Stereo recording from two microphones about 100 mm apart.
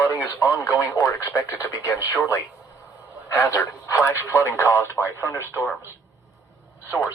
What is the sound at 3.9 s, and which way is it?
Speech, 30° left (ahead or behind).